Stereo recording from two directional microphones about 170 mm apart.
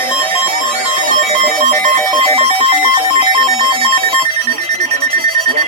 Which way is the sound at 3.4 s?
35° right (ahead or behind).